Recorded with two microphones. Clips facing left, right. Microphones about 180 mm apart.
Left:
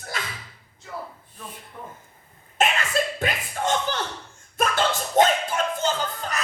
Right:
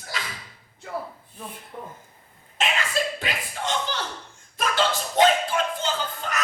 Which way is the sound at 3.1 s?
50° left (ahead or behind).